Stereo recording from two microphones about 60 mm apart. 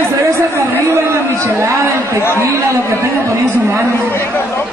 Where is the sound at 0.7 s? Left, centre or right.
Right.